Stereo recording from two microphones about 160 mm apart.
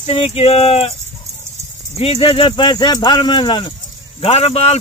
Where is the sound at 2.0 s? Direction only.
35° left (ahead or behind).